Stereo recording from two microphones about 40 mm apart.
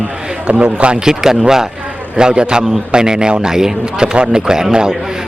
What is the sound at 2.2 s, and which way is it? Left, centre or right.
A man's voice, centre.